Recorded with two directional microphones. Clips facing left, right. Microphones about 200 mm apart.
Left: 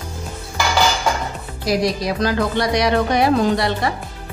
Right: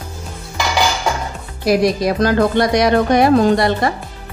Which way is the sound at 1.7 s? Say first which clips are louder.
Right 5 dB; 50° right (ahead or behind).